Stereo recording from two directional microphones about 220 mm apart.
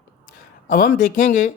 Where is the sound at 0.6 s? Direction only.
40° left (ahead or behind).